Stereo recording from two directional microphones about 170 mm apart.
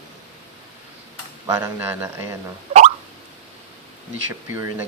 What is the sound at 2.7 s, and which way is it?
Plop, 40° right (ahead or behind).